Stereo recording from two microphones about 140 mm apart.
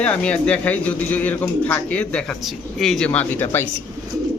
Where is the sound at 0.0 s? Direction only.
10° left (ahead or behind).